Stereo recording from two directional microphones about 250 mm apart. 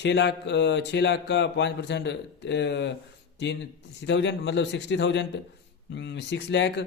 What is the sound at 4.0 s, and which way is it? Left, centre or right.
Speech, left.